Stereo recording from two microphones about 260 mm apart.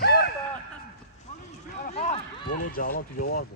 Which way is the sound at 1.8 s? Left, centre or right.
Left.